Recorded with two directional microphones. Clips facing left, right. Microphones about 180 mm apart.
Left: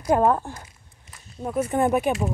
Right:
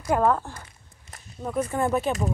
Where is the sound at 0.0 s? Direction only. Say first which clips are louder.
Left 2 dB; 20° left (ahead or behind).